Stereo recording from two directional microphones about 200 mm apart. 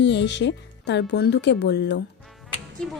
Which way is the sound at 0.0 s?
60° left (ahead or behind).